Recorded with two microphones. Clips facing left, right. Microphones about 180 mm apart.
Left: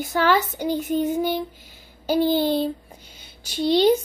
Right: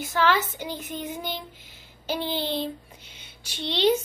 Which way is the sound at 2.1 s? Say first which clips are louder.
Left 9 dB; 45° left (ahead or behind).